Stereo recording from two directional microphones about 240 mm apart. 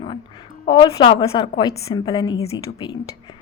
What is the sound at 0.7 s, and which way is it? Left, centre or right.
A woman's voice, centre.